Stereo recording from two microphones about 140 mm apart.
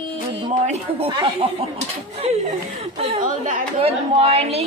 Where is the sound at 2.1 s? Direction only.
50° right (ahead or behind).